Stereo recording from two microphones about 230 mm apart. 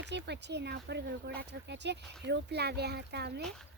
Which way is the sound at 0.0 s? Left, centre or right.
Right.